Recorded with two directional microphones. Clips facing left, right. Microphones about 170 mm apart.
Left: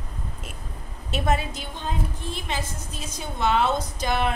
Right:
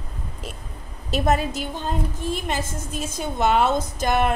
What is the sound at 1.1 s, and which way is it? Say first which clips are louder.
A woman's voice: right 4 dB; 40° right (ahead or behind).